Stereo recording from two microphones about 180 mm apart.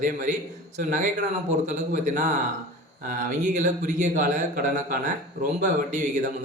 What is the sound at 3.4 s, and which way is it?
A man's voice, 45° right (ahead or behind).